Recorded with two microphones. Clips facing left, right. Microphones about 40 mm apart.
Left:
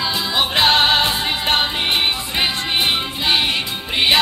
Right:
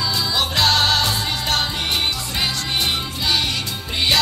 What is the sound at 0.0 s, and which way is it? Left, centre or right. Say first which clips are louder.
Music: left 2 dB; left.